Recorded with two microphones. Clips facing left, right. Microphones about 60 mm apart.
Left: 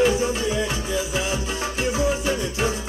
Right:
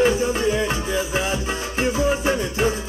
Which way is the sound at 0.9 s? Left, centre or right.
Right.